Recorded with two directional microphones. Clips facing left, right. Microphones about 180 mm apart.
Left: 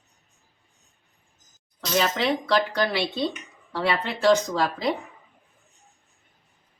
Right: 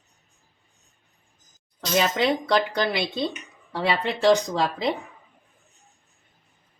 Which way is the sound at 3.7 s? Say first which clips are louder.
Right 1 dB; 20° right (ahead or behind).